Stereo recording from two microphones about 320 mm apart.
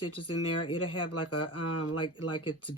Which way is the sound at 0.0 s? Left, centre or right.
Left.